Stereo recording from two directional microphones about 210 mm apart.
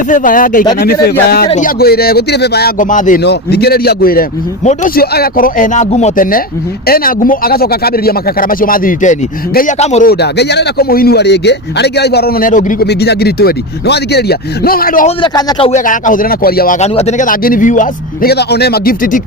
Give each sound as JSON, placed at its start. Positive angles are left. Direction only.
{"t": 0.1, "sound": "a man's voice", "side_deg": 40}
{"t": 3.2, "sound": "a man's voice", "side_deg": 50}
{"t": 10.1, "sound": "a man's voice", "side_deg": 50}
{"t": 12.9, "sound": "a man's voice", "side_deg": 50}
{"t": 15.0, "sound": "speech", "side_deg": 20}
{"t": 15.8, "sound": "a man's voice", "side_deg": 40}